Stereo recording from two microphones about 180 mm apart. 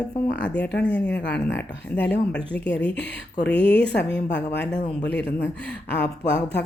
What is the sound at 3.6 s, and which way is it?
Speech, 70° left (ahead or behind).